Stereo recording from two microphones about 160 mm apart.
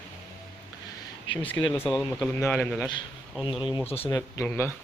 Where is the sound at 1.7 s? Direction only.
10° left (ahead or behind).